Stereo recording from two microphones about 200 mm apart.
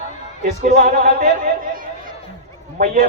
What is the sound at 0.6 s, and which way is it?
Speech, 45° right (ahead or behind).